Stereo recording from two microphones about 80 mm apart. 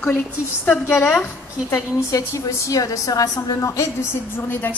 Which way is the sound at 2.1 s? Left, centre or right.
Left.